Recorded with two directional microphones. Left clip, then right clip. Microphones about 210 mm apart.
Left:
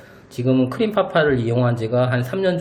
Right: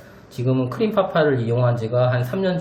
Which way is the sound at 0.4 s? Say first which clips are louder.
Left 2 dB; 40° left (ahead or behind).